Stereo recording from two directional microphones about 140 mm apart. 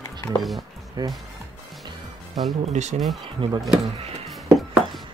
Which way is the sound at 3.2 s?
35° right (ahead or behind).